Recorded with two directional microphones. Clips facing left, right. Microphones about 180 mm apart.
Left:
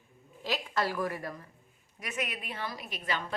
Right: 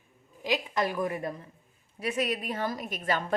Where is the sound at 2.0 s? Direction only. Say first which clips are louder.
Right 7 dB; 35° right (ahead or behind).